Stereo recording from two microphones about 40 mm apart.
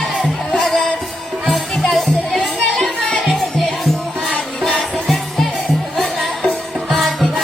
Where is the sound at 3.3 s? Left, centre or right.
Centre.